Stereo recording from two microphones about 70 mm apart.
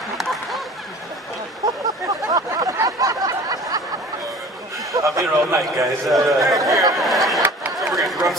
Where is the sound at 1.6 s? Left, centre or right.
Right.